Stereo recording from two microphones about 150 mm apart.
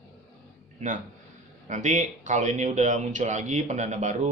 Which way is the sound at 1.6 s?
55° right (ahead or behind).